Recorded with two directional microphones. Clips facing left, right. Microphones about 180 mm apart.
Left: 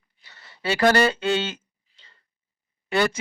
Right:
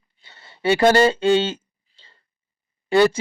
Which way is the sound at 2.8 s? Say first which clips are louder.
Right 7 dB; 30° right (ahead or behind).